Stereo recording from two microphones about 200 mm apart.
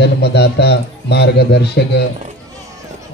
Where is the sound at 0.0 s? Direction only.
55° left (ahead or behind).